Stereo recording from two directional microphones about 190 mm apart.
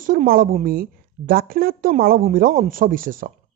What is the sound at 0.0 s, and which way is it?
A woman's voice, 45° right (ahead or behind).